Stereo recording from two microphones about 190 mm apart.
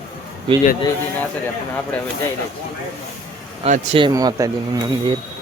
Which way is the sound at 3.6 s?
35° right (ahead or behind).